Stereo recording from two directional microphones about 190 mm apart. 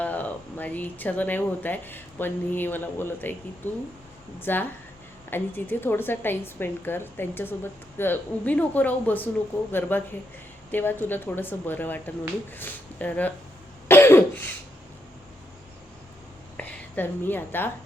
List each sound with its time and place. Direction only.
0.0 s a woman's voice: 10° left (ahead or behind)
13.8 s cough: 10° left (ahead or behind)
16.6 s a woman's voice: 10° left (ahead or behind)